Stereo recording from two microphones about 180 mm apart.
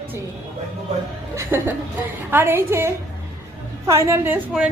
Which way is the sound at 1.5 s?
10° right (ahead or behind).